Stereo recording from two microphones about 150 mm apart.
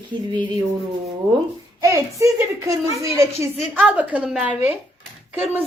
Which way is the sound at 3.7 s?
10° right (ahead or behind).